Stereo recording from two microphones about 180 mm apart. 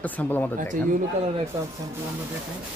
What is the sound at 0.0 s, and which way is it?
Speech, 10° left (ahead or behind).